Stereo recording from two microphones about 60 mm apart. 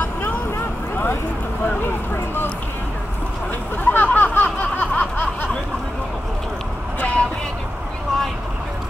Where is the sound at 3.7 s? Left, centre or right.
Left.